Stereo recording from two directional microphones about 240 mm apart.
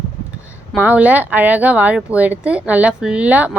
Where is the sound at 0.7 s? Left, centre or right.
Centre.